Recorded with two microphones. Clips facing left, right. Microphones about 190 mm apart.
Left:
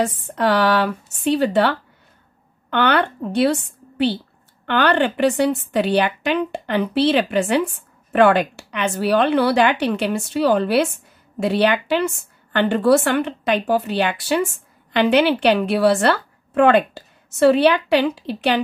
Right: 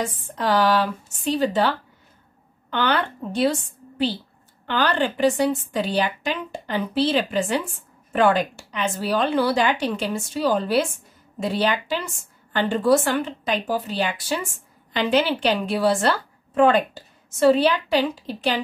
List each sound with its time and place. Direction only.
0.0 s a woman's voice: 65° left (ahead or behind)
4.6 s a woman's voice: 65° left (ahead or behind)